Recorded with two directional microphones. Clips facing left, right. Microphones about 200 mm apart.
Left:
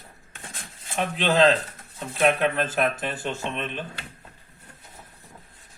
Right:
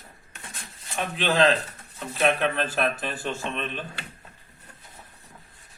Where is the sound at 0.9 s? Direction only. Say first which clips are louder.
Left 2 dB; 20° left (ahead or behind).